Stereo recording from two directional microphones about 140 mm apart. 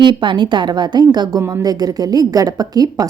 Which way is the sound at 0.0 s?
35° right (ahead or behind).